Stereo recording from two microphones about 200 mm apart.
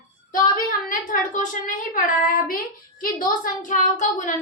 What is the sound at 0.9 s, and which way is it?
A woman's voice, 40° left (ahead or behind).